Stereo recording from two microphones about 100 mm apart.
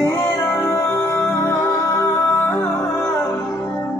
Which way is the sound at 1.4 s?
30° left (ahead or behind).